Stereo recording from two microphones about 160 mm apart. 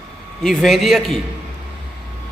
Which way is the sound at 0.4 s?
Centre (ahead or behind).